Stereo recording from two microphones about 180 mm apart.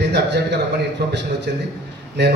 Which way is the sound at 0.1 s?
70° right (ahead or behind).